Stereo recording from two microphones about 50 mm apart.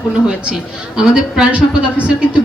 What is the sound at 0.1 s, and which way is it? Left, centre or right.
A woman's voice, right.